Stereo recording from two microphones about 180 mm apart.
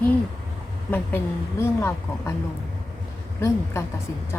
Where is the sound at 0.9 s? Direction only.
10° left (ahead or behind).